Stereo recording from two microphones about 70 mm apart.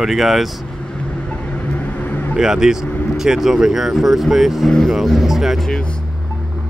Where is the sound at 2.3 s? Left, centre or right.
Centre.